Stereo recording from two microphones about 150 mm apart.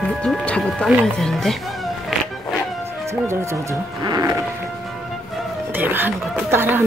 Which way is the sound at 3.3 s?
25° right (ahead or behind).